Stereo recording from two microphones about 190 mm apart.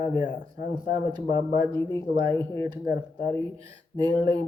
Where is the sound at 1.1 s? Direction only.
25° right (ahead or behind).